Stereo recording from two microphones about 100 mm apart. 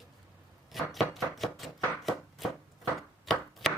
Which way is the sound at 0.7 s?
Centre (ahead or behind).